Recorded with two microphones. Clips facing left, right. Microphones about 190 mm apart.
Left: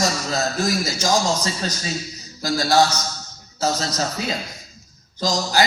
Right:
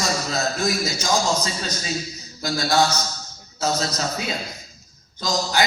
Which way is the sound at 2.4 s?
35° left (ahead or behind).